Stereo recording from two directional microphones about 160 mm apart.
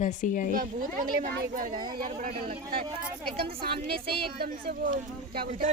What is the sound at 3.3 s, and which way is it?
A woman's voice, 75° right (ahead or behind).